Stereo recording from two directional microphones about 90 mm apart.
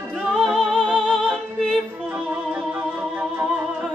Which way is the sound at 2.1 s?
20° right (ahead or behind).